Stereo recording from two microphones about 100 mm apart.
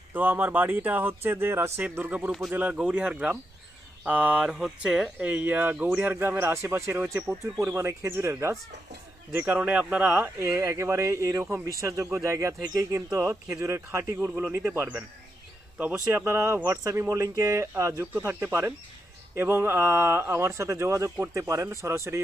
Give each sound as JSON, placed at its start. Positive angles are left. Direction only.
{"t": 0.1, "sound": "speech", "side_deg": -20}
{"t": 9.5, "sound": "speech", "side_deg": -15}
{"t": 10.5, "sound": "speech", "side_deg": -30}
{"t": 14.2, "sound": "speech", "side_deg": -10}